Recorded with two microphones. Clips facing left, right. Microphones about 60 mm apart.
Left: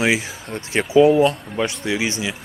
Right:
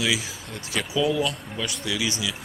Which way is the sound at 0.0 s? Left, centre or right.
Left.